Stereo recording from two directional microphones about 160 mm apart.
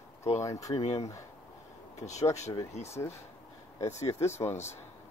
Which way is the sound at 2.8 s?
15° left (ahead or behind).